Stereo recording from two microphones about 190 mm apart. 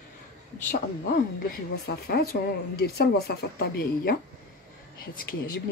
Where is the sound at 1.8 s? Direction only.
55° left (ahead or behind).